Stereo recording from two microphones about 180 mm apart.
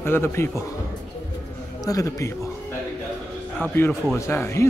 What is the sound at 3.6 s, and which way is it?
A man's voice, 10° left (ahead or behind).